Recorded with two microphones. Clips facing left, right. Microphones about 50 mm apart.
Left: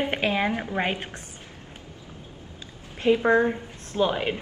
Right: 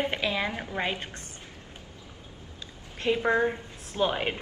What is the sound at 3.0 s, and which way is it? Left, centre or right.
Speech, centre.